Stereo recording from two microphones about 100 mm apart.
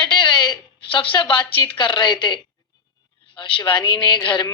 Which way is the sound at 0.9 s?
50° left (ahead or behind).